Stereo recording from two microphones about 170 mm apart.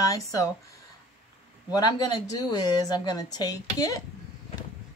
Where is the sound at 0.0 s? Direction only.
20° left (ahead or behind).